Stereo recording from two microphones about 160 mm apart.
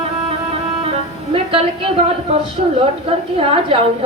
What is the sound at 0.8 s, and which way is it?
Music, 35° right (ahead or behind).